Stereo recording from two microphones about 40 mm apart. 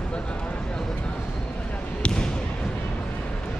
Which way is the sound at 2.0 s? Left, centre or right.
Left.